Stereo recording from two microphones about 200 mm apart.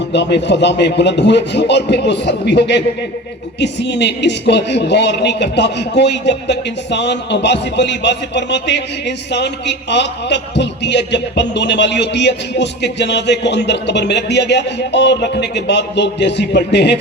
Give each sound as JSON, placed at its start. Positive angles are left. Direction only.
{"t": 0.1, "sound": "speech", "side_deg": 60}